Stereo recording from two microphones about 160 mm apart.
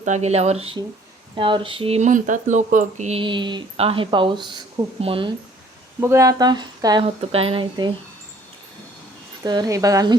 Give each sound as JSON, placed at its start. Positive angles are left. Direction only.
{"t": 0.0, "sound": "speech", "side_deg": -45}
{"t": 3.2, "sound": "speech", "side_deg": -30}
{"t": 6.0, "sound": "speech", "side_deg": -15}
{"t": 7.2, "sound": "speech", "side_deg": -40}
{"t": 9.4, "sound": "speech", "side_deg": -25}